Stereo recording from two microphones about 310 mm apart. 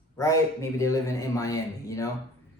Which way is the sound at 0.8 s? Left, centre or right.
Centre.